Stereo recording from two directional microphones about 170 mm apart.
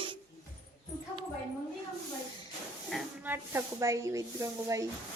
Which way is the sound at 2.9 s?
5° left (ahead or behind).